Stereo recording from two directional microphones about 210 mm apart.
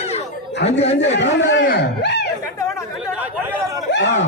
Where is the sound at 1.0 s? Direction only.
60° left (ahead or behind).